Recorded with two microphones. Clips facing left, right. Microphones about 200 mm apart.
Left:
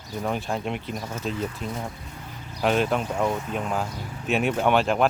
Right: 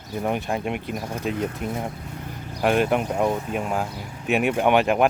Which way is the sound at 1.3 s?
60° right (ahead or behind).